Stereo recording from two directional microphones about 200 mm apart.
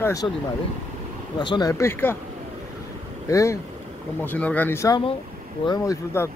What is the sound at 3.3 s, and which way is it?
Speech, 15° left (ahead or behind).